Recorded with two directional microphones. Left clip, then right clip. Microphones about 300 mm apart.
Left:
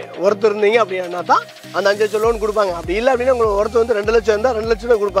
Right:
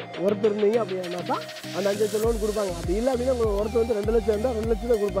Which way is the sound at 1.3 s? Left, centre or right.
Centre.